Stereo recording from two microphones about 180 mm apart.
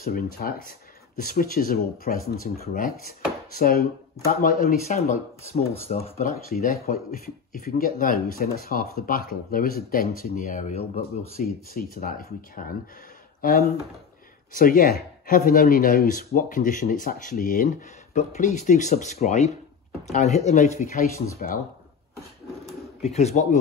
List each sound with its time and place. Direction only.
0.0 s speech: 55° left (ahead or behind)
4.8 s speech: 40° left (ahead or behind)
6.5 s speech: 55° left (ahead or behind); by 11.1 s 35° left (ahead or behind)
11.3 s speech: 55° left (ahead or behind)
23.0 s speech: 35° left (ahead or behind)